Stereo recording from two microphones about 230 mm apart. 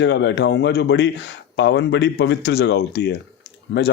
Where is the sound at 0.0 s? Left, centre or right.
Left.